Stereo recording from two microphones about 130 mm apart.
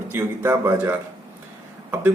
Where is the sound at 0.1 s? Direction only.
20° right (ahead or behind).